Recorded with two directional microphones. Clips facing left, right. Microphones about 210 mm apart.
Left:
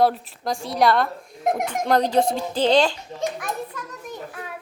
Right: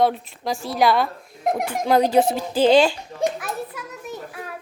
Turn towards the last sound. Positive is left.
turn(degrees=0)  # may be behind; listen again after turning